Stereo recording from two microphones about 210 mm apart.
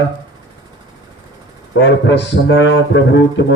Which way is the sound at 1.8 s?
55° left (ahead or behind).